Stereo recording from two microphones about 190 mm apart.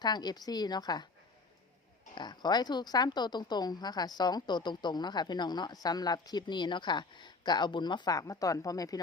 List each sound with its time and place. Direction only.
0.0 s a woman's voice: 20° left (ahead or behind)
2.1 s a woman's voice: 20° left (ahead or behind)